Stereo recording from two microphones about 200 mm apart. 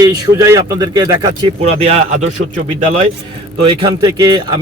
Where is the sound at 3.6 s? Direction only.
20° right (ahead or behind).